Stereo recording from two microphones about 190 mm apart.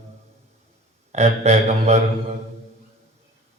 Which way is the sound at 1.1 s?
35° right (ahead or behind).